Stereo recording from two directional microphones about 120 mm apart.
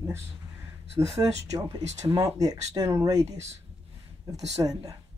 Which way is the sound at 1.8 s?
55° right (ahead or behind).